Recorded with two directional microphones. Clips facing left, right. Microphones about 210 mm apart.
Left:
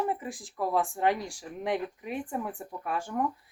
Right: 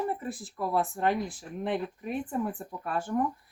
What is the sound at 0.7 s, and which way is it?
Speech, 15° left (ahead or behind).